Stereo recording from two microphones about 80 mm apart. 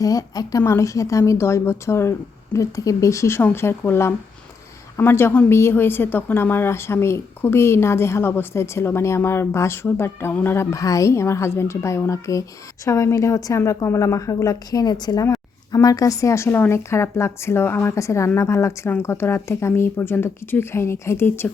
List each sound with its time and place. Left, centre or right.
0.0 s a woman's voice: left
15.2 s a woman's voice: left